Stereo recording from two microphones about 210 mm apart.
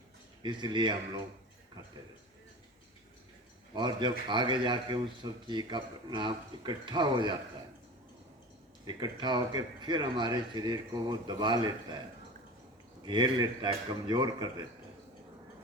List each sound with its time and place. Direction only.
0.4 s a man's voice: 20° right (ahead or behind)
3.8 s a man's voice: 20° right (ahead or behind)
8.8 s a man's voice: 20° right (ahead or behind)
13.1 s a man's voice: 20° right (ahead or behind)